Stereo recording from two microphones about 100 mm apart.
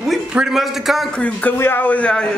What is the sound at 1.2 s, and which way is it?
A man's voice, 20° left (ahead or behind).